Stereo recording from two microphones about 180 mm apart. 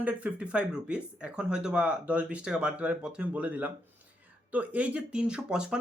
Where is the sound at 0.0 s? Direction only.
5° right (ahead or behind).